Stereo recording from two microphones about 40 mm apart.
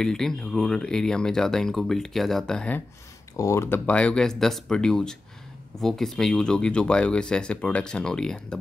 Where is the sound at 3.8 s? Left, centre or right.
Left.